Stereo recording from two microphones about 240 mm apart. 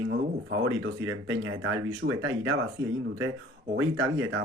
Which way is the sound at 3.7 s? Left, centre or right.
Right.